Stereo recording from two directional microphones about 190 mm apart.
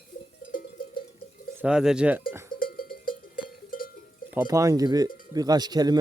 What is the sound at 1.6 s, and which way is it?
Speech, 5° right (ahead or behind).